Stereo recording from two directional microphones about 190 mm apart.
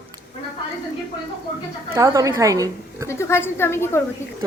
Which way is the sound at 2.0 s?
15° right (ahead or behind).